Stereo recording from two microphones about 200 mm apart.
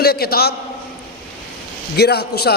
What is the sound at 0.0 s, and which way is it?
Speech, 50° left (ahead or behind).